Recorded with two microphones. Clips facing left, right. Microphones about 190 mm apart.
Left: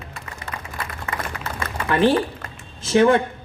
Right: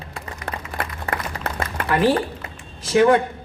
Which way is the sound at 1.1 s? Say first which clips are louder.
Right 2 dB; 35° right (ahead or behind).